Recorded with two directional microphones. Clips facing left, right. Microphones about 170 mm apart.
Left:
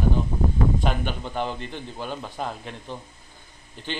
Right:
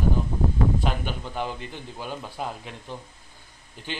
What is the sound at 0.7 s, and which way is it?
A man's voice, 5° right (ahead or behind).